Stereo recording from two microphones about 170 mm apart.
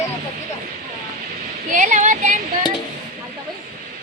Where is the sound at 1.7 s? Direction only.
50° right (ahead or behind).